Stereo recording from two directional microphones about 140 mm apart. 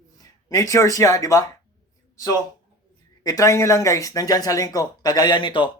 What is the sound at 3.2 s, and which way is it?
Speech, 25° left (ahead or behind).